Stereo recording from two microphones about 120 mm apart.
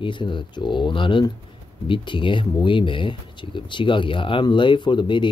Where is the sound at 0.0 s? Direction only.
45° left (ahead or behind).